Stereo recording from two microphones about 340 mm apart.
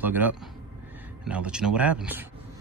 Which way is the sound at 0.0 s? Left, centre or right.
Centre.